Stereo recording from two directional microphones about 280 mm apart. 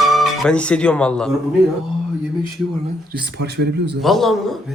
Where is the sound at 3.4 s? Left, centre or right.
Right.